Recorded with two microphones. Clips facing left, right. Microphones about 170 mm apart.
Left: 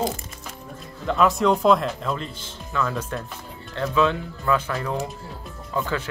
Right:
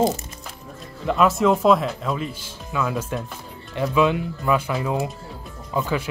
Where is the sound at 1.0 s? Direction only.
5° right (ahead or behind).